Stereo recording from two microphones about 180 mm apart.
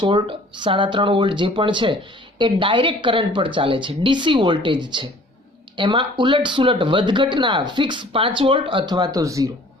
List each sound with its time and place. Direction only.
0.0 s speech: 25° right (ahead or behind)